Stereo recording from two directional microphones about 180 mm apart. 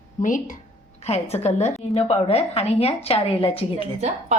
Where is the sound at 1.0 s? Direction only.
35° left (ahead or behind).